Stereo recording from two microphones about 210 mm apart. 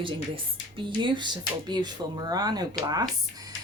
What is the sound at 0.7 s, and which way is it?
A woman's voice, 25° right (ahead or behind).